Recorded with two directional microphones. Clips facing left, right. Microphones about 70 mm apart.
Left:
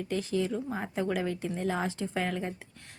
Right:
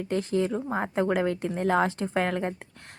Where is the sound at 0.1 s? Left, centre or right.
Right.